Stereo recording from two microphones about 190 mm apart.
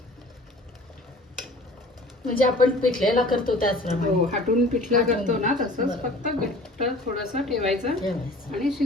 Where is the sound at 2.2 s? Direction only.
50° left (ahead or behind).